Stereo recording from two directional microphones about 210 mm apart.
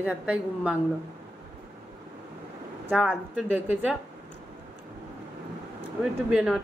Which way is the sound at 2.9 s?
5° left (ahead or behind).